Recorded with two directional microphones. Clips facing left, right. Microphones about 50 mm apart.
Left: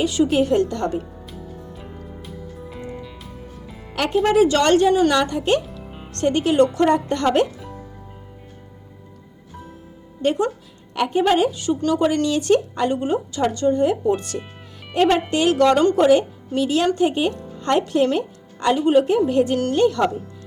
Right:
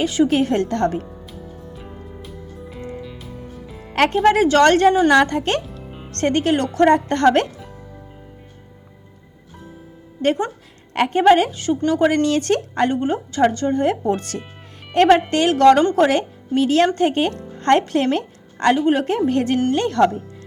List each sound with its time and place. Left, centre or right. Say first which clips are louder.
0.0 s a woman's voice: right 1 dB; right
1.0 s music: even; centre
4.1 s a woman's voice: even; right
10.2 s a woman's voice: even; right
14.3 s speech: left 1 dB; centre
14.9 s a woman's voice: right 4 dB; right
16.0 s a woman's voice: left 4 dB; right